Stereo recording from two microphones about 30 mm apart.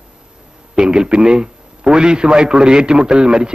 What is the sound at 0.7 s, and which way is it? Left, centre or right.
A man's voice, right.